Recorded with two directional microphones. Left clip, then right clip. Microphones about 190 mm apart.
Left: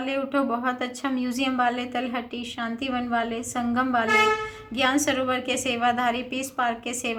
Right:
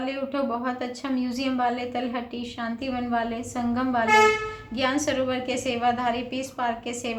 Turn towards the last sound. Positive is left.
turn(degrees=25)  # may be behind; listen again after turning